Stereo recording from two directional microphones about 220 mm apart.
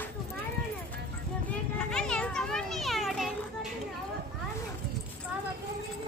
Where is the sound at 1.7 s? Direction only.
5° left (ahead or behind).